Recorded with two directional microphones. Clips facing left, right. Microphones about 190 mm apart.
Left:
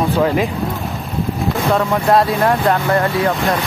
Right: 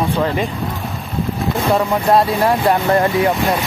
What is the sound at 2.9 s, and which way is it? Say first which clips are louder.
Speech: right 1 dB; 20° right (ahead or behind).